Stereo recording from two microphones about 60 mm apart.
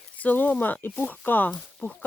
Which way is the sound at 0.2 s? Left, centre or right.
Left.